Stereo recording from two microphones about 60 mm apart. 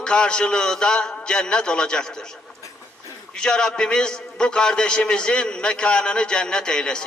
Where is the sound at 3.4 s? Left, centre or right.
Centre.